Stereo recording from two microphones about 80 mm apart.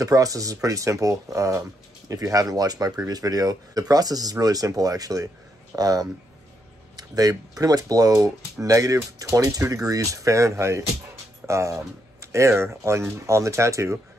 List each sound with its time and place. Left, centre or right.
0.0 s speech: right